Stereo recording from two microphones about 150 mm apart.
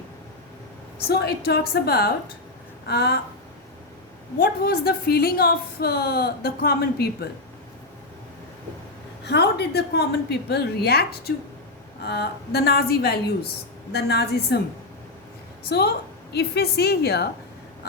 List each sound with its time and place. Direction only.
1.0 s a woman's voice: 90° left
4.4 s a woman's voice: 85° left
9.2 s a woman's voice: 90° left
15.7 s a woman's voice: 90° left